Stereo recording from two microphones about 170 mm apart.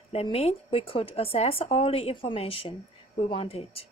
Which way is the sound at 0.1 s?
35° left (ahead or behind).